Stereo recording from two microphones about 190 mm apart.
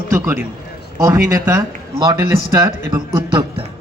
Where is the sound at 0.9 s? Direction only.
15° right (ahead or behind).